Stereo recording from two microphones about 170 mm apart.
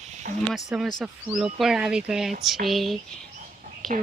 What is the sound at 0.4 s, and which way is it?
Speech, centre (ahead or behind).